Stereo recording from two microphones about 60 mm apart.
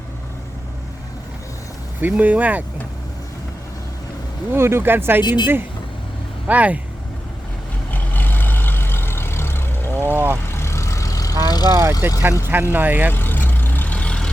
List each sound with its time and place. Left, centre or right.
2.0 s speech: right
4.5 s speech: right
6.5 s speech: right
7.9 s vehicle: left
10.1 s vehicle: right
10.5 s vehicle: left
11.7 s speech: right
12.5 s speech: right
13.1 s vehicle: left